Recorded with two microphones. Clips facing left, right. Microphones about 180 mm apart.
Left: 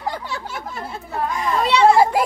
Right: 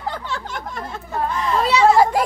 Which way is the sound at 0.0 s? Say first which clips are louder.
Even; 10° left (ahead or behind).